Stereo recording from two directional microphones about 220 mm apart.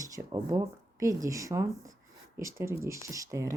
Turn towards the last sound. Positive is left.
turn(degrees=-15)  # may be behind; listen again after turning